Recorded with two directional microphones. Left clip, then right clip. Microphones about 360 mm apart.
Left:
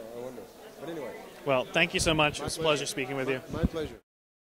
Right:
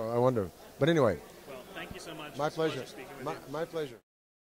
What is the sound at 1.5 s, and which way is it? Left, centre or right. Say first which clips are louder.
Speech: left 18 dB; left.